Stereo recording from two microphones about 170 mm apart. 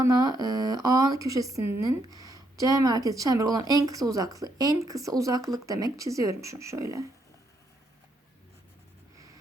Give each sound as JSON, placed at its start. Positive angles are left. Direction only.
{"t": 0.0, "sound": "speech", "side_deg": -20}